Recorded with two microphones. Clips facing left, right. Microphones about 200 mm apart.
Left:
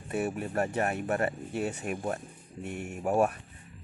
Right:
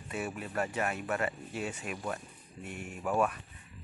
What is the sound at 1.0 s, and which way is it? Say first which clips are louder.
Speech: left 4 dB; 40° left (ahead or behind).